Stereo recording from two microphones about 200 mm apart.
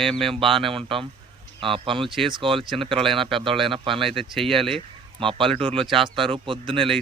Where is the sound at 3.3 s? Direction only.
25° right (ahead or behind).